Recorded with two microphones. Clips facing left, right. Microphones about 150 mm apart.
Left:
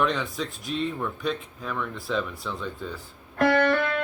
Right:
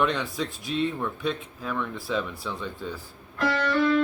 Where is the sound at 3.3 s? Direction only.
55° left (ahead or behind).